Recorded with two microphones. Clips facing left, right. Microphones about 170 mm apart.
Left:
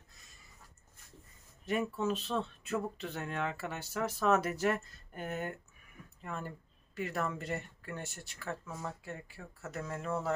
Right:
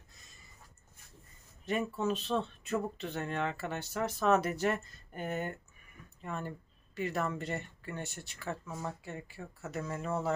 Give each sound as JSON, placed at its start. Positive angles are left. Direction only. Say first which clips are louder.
{"t": 1.7, "sound": "speech", "louder": "even", "side_deg": 5}